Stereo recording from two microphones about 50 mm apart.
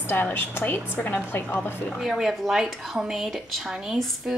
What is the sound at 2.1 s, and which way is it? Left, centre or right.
A woman's voice, centre.